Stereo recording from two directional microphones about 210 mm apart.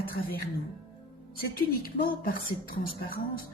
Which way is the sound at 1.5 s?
45° left (ahead or behind).